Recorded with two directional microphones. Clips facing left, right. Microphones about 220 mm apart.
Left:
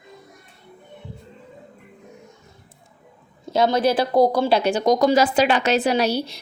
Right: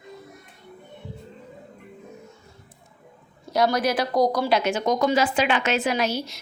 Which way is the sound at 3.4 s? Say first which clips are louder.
Left 3 dB; 25° left (ahead or behind).